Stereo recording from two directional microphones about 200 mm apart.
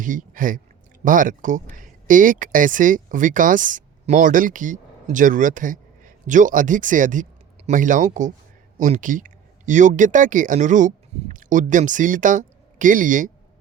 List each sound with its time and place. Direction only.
0.0 s speech: 40° right (ahead or behind)